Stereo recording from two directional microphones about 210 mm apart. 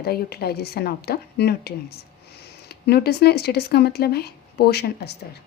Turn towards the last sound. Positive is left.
turn(degrees=50)  # may be behind; listen again after turning